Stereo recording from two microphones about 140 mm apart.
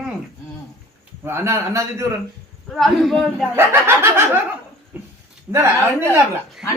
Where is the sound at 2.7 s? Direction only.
Centre (ahead or behind).